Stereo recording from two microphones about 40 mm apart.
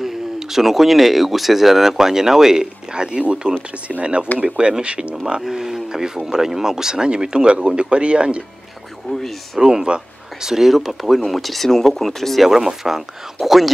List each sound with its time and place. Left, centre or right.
0.0 s speech: centre; by 5.1 s right
5.4 s speech: centre; by 8.5 s right
9.1 s speech: left
9.6 s speech: centre
12.4 s speech: centre